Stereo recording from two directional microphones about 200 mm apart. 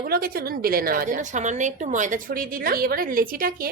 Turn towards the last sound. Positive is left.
turn(degrees=-45)  # may be behind; listen again after turning